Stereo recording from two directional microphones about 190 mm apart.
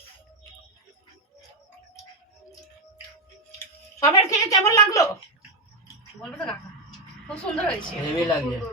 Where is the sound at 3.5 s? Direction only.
15° left (ahead or behind).